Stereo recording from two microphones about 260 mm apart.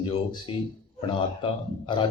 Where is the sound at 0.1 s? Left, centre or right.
Centre.